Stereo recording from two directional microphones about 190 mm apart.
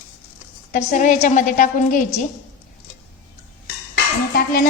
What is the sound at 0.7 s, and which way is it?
A woman's voice, 40° left (ahead or behind).